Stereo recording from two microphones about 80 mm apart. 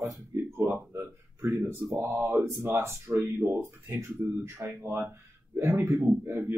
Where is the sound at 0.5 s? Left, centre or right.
Right.